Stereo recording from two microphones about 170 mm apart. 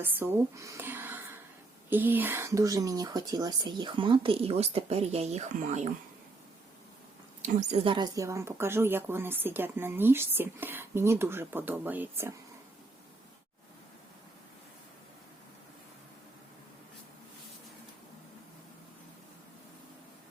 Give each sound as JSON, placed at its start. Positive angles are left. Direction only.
{"t": 0.0, "sound": "speech", "side_deg": -10}
{"t": 7.4, "sound": "speech", "side_deg": -45}
{"t": 7.9, "sound": "speech", "side_deg": -25}